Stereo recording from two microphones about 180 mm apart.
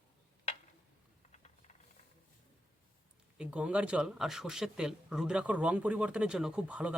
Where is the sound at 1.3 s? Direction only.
40° left (ahead or behind).